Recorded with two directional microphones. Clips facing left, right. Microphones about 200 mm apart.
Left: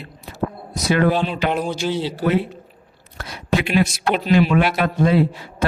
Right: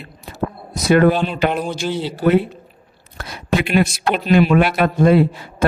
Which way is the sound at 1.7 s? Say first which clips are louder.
Even; 55° right (ahead or behind).